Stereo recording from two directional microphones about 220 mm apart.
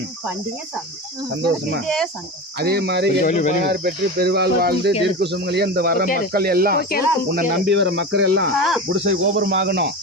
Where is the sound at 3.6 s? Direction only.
45° right (ahead or behind).